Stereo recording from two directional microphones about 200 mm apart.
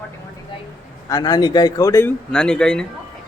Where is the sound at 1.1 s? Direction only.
20° left (ahead or behind).